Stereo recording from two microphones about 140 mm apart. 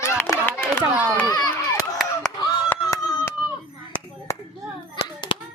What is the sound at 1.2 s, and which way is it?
Run, 25° left (ahead or behind).